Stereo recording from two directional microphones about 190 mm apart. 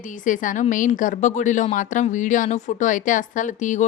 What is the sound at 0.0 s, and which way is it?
Speech, 45° left (ahead or behind).